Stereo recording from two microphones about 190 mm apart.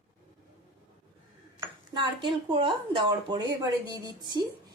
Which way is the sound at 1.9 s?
25° right (ahead or behind).